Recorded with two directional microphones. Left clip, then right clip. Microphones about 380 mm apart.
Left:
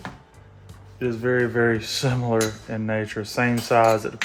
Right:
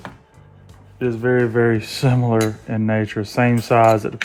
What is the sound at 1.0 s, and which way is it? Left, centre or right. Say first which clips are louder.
Cutlery: right 4 dB; right.